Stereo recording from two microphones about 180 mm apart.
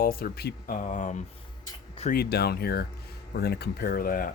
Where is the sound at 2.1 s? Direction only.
60° left (ahead or behind).